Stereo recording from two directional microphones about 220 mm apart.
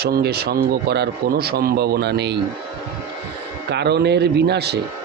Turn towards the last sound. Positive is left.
turn(degrees=-50)  # may be behind; listen again after turning